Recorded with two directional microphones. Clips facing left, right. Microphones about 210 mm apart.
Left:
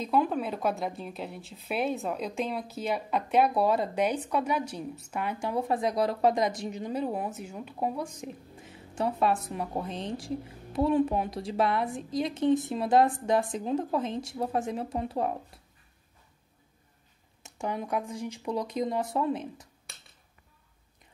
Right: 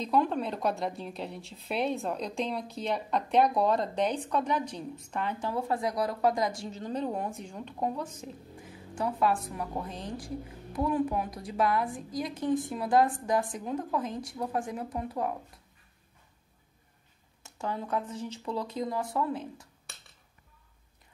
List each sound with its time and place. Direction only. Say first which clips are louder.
0.0 s speech: left 1 dB; 5° left (ahead or behind); by 15.3 s 25° left (ahead or behind)
17.4 s speech: left 2 dB; 15° left (ahead or behind)